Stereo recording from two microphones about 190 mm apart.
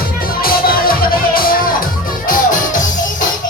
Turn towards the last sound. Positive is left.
turn(degrees=40)  # may be behind; listen again after turning